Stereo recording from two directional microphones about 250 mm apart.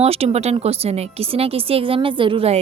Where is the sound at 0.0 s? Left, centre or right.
Right.